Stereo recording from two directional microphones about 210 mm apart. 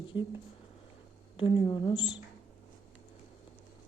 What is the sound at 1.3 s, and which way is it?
Speech, 25° left (ahead or behind).